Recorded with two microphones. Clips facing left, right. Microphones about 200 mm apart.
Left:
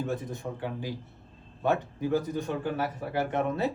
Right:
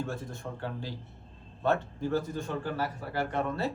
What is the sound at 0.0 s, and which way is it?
A man's voice, 20° left (ahead or behind).